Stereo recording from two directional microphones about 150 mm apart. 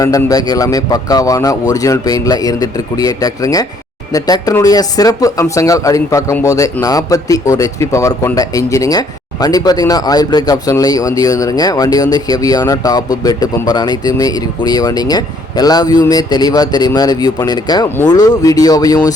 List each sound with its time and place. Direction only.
0.0 s speech: 25° left (ahead or behind)